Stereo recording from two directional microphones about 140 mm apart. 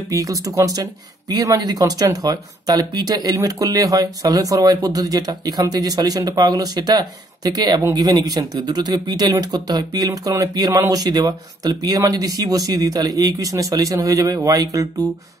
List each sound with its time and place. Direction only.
0.1 s speech: 25° right (ahead or behind)